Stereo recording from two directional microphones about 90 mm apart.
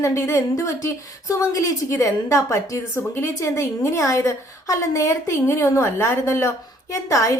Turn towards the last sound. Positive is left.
turn(degrees=35)  # may be behind; listen again after turning